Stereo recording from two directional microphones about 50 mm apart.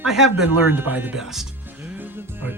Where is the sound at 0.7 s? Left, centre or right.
Right.